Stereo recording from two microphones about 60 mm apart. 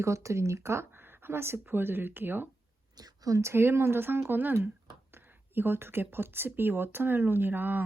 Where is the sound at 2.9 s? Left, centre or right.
Right.